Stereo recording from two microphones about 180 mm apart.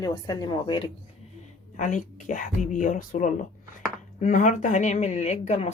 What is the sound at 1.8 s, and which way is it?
Speech, 45° left (ahead or behind).